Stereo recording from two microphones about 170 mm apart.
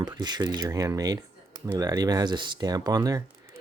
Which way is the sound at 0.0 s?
25° right (ahead or behind).